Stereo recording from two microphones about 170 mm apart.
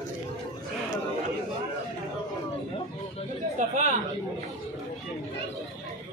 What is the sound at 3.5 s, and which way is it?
Speech, 45° right (ahead or behind).